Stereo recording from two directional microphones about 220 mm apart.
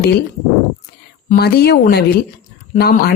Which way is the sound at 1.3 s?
45° left (ahead or behind).